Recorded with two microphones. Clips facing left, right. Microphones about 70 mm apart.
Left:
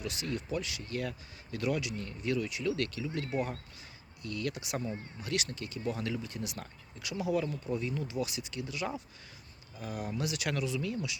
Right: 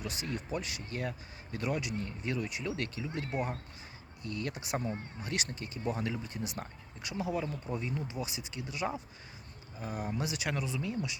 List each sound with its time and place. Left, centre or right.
0.0 s speech: right
0.9 s speech: right